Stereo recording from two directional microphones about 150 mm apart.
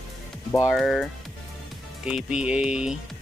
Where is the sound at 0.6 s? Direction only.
Centre (ahead or behind).